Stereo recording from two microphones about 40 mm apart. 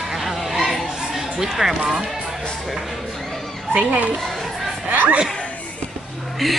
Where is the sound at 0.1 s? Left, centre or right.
Centre.